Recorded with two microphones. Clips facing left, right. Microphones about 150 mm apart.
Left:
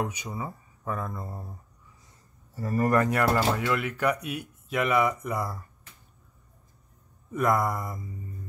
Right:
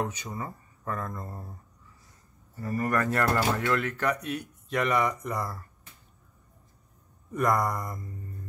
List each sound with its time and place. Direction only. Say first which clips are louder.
0.0 s speech: left 1 dB; 10° left (ahead or behind)
2.5 s speech: left 4 dB; 35° left (ahead or behind)
3.0 s speech: left 2 dB; 15° left (ahead or behind)
7.2 s speech: left 1 dB; centre (ahead or behind)